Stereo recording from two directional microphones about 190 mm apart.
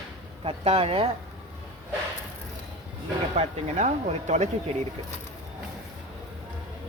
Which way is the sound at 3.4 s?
40° right (ahead or behind).